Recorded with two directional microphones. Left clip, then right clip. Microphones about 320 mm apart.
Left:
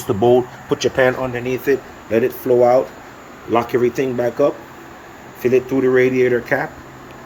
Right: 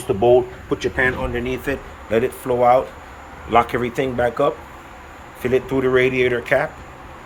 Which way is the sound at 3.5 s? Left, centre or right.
Centre.